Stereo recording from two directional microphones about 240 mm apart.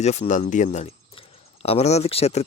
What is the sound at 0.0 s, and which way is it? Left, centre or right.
Speech, left.